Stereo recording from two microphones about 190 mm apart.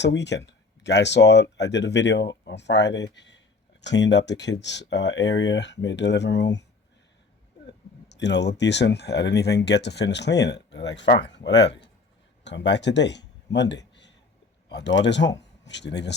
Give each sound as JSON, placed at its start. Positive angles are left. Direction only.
{"t": 0.0, "sound": "speech", "side_deg": 65}
{"t": 8.1, "sound": "speech", "side_deg": 65}